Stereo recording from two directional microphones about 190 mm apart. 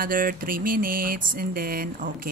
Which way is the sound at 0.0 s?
50° right (ahead or behind).